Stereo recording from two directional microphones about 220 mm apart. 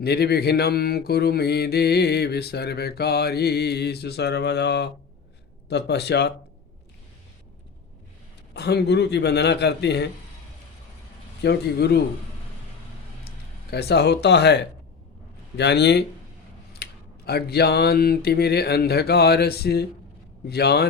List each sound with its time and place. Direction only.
0.0 s mantra: 45° left (ahead or behind)
8.5 s mantra: 50° left (ahead or behind)
11.4 s mantra: 45° left (ahead or behind)
13.2 s speech: 45° left (ahead or behind)
15.5 s mantra: 50° left (ahead or behind)